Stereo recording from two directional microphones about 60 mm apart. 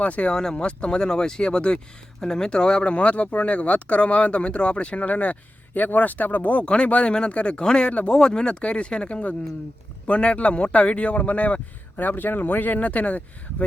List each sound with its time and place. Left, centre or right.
0.0 s speech: left